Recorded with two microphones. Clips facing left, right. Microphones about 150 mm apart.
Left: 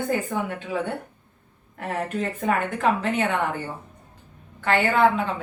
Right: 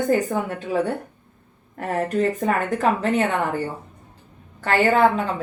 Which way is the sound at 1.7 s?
40° right (ahead or behind).